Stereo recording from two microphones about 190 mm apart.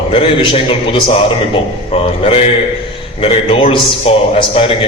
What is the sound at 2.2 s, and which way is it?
A man's voice, 30° left (ahead or behind).